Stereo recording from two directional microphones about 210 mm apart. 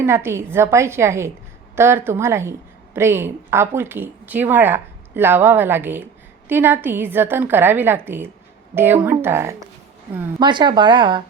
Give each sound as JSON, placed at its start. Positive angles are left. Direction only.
{"t": 0.0, "sound": "a woman's voice", "side_deg": -10}